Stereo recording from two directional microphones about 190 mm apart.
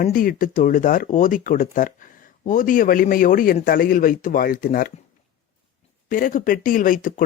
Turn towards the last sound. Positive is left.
turn(degrees=45)  # may be behind; listen again after turning